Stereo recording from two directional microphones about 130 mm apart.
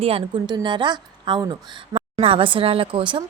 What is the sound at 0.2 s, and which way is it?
A woman's voice, 35° right (ahead or behind).